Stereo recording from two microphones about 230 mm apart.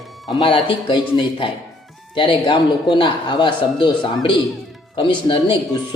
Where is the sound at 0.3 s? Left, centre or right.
Left.